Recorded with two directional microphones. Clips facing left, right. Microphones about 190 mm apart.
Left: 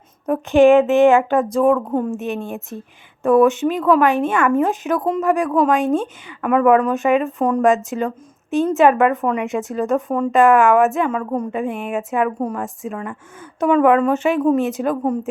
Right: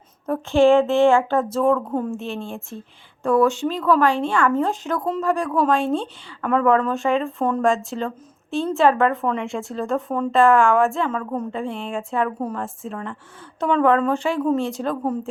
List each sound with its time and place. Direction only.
0.3 s a woman's voice: 15° left (ahead or behind)